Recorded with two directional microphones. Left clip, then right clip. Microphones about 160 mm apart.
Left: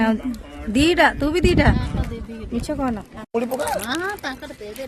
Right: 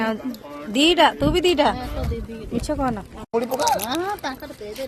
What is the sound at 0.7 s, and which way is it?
Speech, 25° left (ahead or behind).